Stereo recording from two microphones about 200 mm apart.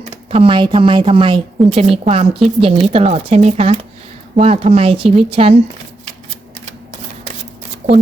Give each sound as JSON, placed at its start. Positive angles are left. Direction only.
{"t": 0.3, "sound": "a woman's voice", "side_deg": -25}